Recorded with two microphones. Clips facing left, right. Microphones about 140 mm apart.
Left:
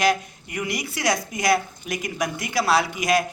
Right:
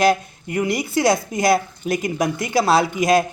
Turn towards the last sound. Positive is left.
turn(degrees=-25)  # may be behind; listen again after turning